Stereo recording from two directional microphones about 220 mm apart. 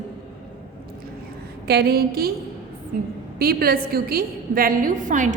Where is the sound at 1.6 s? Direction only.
45° right (ahead or behind).